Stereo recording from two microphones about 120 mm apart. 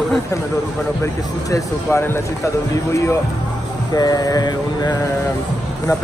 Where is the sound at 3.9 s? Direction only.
30° left (ahead or behind).